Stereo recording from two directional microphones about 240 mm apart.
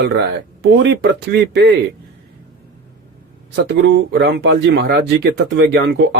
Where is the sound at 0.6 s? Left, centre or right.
Right.